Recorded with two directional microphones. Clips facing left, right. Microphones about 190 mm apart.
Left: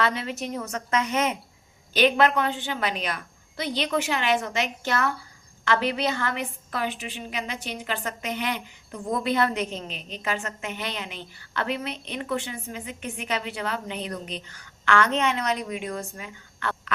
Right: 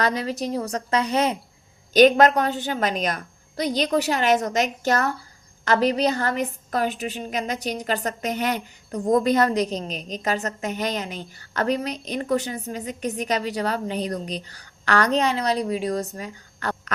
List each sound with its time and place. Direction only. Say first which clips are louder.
0.0 s a woman's voice: right 3 dB; 40° right (ahead or behind)